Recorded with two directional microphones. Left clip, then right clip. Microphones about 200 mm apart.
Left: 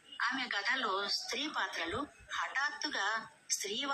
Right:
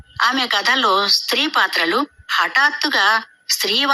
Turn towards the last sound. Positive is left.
turn(degrees=-45)  # may be behind; listen again after turning